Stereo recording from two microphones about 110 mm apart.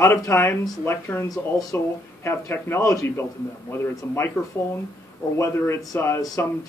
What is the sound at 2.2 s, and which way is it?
Speech, 25° left (ahead or behind).